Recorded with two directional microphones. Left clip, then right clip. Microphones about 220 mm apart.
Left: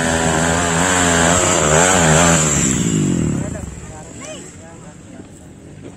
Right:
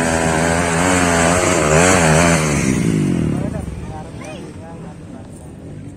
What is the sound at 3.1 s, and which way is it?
Vehicle, 55° left (ahead or behind).